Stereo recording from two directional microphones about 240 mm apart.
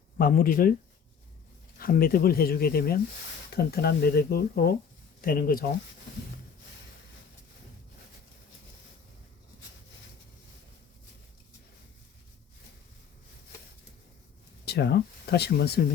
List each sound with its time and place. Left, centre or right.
0.2 s speech: left
1.8 s speech: left
14.6 s speech: left